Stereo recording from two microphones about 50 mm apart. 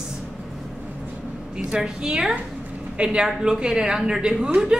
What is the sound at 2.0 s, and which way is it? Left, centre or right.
A woman's voice, centre.